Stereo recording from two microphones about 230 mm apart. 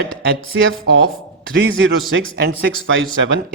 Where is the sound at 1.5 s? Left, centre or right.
Right.